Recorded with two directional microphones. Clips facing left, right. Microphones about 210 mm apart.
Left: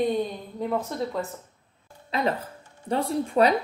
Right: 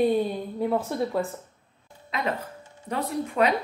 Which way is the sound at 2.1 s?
35° left (ahead or behind).